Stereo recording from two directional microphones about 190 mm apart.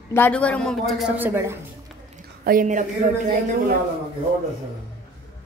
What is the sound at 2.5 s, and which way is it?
Speech, 45° right (ahead or behind).